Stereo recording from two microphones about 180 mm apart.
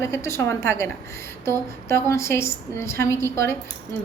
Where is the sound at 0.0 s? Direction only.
15° left (ahead or behind).